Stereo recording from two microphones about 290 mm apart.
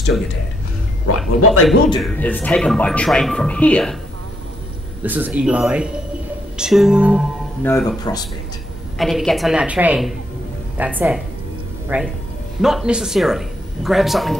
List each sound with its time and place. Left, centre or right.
1.4 s speech: left
1.9 s speech: centre
5.0 s speech: centre
7.6 s speech: centre
8.9 s speech: centre